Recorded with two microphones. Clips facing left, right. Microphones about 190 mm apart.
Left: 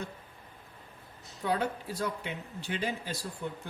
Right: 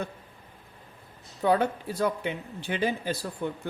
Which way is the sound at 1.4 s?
60° right (ahead or behind).